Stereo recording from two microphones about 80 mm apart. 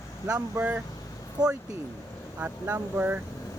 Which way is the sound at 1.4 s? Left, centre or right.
Right.